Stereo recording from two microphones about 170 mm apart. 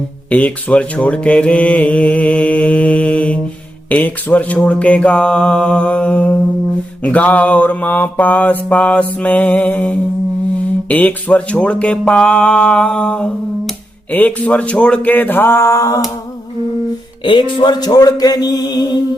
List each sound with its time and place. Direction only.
0.3 s speech: 10° left (ahead or behind)
17.2 s speech: 25° left (ahead or behind)